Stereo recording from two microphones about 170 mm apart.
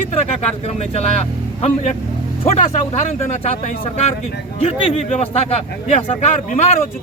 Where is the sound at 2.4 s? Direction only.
40° left (ahead or behind).